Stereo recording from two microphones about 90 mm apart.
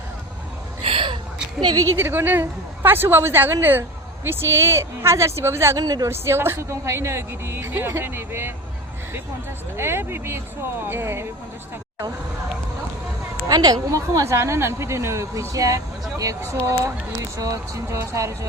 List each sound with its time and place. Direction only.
0.9 s gasp: 80° right
2.0 s a woman's voice: 25° right (ahead or behind)
5.8 s speech: 40° right (ahead or behind)
6.1 s a woman's voice: 30° right (ahead or behind)
9.7 s a woman's voice: 25° right (ahead or behind)
13.5 s speech: 45° right (ahead or behind)